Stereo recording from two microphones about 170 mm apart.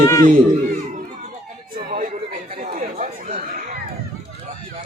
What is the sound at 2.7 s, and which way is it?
Chatter, 45° right (ahead or behind).